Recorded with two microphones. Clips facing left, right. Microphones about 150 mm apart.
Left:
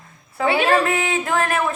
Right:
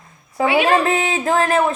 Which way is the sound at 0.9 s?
25° right (ahead or behind).